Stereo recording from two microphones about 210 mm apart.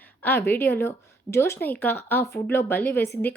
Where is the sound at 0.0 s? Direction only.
10° left (ahead or behind).